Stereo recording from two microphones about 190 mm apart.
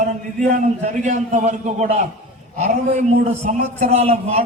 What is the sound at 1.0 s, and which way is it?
Speech, 40° right (ahead or behind).